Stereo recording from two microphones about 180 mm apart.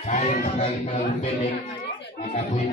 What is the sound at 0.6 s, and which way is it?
A man's voice, 35° left (ahead or behind).